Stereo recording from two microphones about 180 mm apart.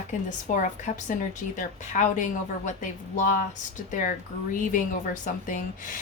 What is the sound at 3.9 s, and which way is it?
Speech, 45° left (ahead or behind).